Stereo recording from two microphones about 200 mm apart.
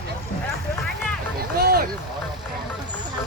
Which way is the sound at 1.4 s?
50° right (ahead or behind).